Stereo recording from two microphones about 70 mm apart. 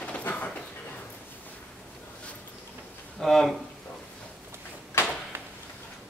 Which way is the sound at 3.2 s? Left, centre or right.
Centre.